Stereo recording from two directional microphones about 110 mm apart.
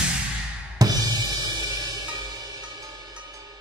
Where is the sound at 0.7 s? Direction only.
35° right (ahead or behind).